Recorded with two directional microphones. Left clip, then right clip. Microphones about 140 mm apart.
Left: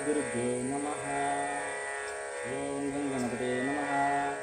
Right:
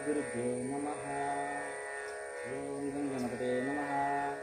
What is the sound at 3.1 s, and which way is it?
Music, 30° left (ahead or behind).